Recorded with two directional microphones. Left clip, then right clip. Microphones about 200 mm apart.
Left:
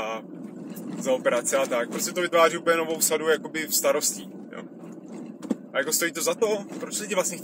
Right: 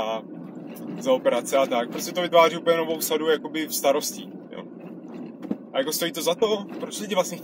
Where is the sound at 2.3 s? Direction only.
55° right (ahead or behind).